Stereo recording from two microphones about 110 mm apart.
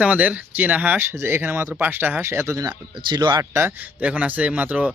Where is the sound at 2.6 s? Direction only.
40° right (ahead or behind).